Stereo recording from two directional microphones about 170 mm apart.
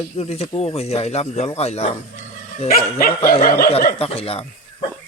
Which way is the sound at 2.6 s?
55° left (ahead or behind).